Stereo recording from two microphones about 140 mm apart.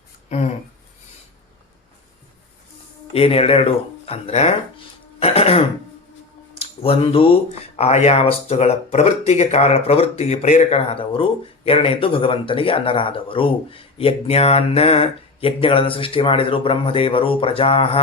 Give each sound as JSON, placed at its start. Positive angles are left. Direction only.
{"t": 0.3, "sound": "a sound", "side_deg": 55}
{"t": 3.1, "sound": "speech", "side_deg": 45}
{"t": 5.2, "sound": "throat clearing", "side_deg": 45}
{"t": 6.6, "sound": "speech", "side_deg": 45}